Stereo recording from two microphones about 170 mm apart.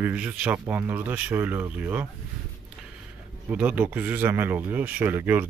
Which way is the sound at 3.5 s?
10° right (ahead or behind).